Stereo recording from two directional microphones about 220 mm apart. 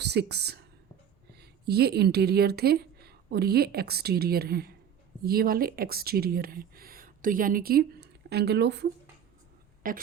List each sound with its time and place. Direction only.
0.0 s a woman's voice: 50° right (ahead or behind)
9.8 s a woman's voice: 40° right (ahead or behind)